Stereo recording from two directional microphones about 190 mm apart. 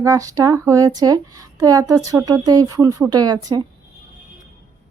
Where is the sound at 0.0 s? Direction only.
15° right (ahead or behind).